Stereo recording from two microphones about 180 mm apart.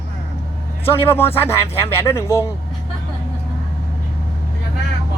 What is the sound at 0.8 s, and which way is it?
A man's voice, 15° left (ahead or behind).